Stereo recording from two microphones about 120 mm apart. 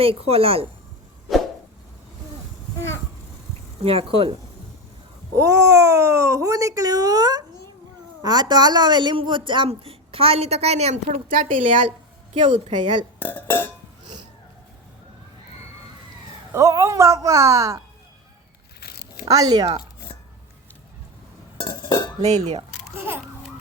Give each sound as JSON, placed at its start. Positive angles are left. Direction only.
{"t": 0.0, "sound": "a woman's voice", "side_deg": -55}
{"t": 3.8, "sound": "a woman's voice", "side_deg": -55}
{"t": 5.4, "sound": "a woman's voice", "side_deg": -25}
{"t": 13.1, "sound": "speech", "side_deg": 15}
{"t": 16.5, "sound": "speech", "side_deg": -25}
{"t": 19.3, "sound": "speech", "side_deg": -30}
{"t": 21.6, "sound": "dishes", "side_deg": 40}
{"t": 22.2, "sound": "speech", "side_deg": -70}
{"t": 23.0, "sound": "speech", "side_deg": -20}